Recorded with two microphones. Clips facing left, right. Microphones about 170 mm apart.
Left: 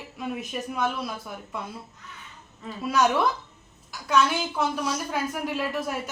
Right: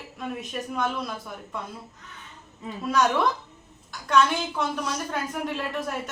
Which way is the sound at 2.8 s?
5° left (ahead or behind).